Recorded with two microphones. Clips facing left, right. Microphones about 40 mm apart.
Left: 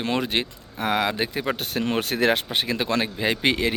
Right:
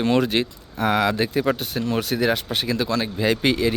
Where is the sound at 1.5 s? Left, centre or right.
Left.